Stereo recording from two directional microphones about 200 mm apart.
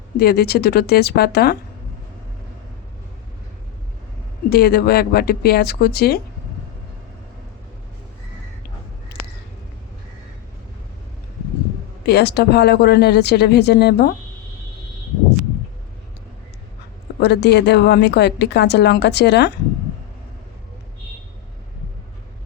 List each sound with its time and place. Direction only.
0.2 s speech: 50° left (ahead or behind)
4.4 s speech: 50° left (ahead or behind)
12.0 s a woman's voice: 55° left (ahead or behind)
17.2 s a woman's voice: 55° left (ahead or behind)